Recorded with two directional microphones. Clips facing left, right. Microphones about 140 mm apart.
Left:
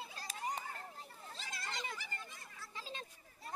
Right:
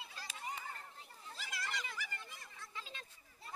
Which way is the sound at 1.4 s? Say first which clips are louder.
Right 1 dB; 25° left (ahead or behind).